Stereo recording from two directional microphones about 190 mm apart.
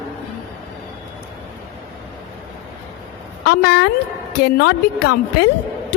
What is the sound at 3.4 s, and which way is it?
A woman's voice, 60° left (ahead or behind).